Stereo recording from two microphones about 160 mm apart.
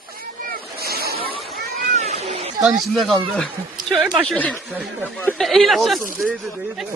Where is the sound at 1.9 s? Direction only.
40° right (ahead or behind).